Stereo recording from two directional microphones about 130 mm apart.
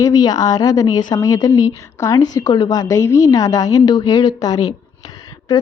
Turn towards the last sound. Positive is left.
turn(degrees=30)  # may be behind; listen again after turning